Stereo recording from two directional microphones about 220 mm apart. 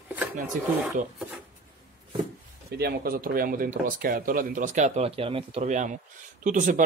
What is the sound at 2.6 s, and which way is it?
Speech, 45° right (ahead or behind).